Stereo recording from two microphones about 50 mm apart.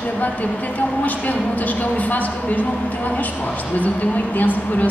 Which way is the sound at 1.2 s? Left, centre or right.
Left.